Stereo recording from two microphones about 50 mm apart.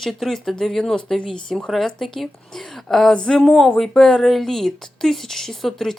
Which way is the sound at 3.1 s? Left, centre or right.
Centre.